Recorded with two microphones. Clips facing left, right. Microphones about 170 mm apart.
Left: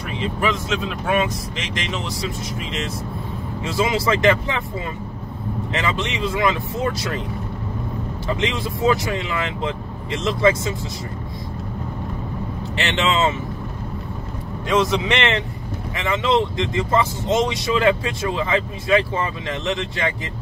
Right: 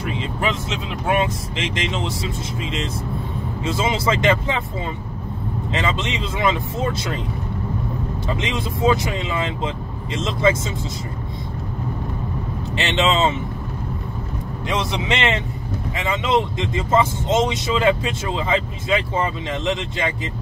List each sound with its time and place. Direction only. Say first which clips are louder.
0.4 s speech: left 3 dB; 25° right (ahead or behind)
3.6 s speech: left 1 dB; 20° right (ahead or behind)
5.7 s speech: right 1 dB; 20° right (ahead or behind)
8.4 s speech: left 1 dB; 20° right (ahead or behind)
12.7 s speech: right 2 dB; 20° right (ahead or behind)
14.7 s speech: left 4 dB; 20° right (ahead or behind)